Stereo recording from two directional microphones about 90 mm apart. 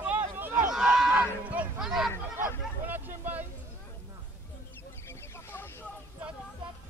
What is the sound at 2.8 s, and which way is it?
Vehicle, 20° right (ahead or behind).